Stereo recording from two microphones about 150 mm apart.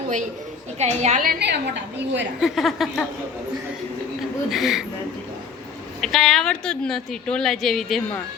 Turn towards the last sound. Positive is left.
turn(degrees=0)  # may be behind; listen again after turning